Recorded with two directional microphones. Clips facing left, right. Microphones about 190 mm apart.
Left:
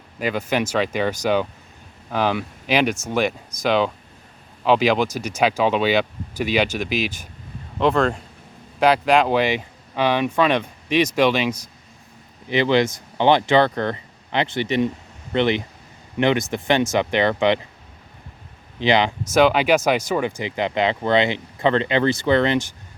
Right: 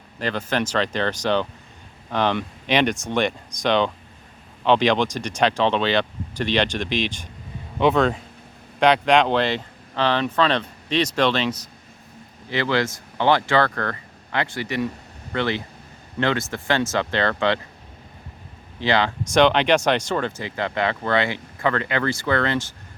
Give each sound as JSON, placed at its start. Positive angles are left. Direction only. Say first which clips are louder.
{"t": 0.2, "sound": "speech", "louder": "left 2 dB", "side_deg": 10}
{"t": 18.8, "sound": "speech", "louder": "left 3 dB", "side_deg": 15}
{"t": 19.3, "sound": "speech", "louder": "left 1 dB", "side_deg": 5}